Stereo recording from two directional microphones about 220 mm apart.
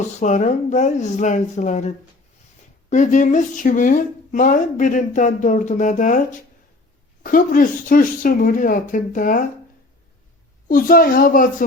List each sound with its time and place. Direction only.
0.2 s a woman's voice: 35° left (ahead or behind)
2.9 s a woman's voice: 35° left (ahead or behind)
7.2 s a woman's voice: 40° left (ahead or behind)
10.7 s a woman's voice: 40° left (ahead or behind)